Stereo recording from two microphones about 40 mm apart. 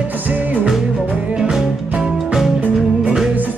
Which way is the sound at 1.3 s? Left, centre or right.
Centre.